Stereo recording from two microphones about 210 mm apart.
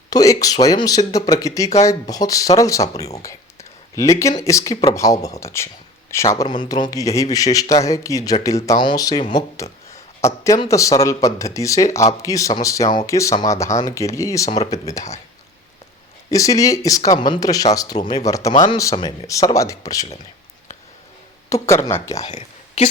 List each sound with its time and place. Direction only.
0.1 s speech: 15° left (ahead or behind)
3.2 s a sound: 15° left (ahead or behind)
4.4 s speech: 15° left (ahead or behind)
10.2 s speech: 15° left (ahead or behind)
16.3 s speech: 15° left (ahead or behind)
21.5 s speech: 15° left (ahead or behind)
22.2 s a sound: 30° left (ahead or behind)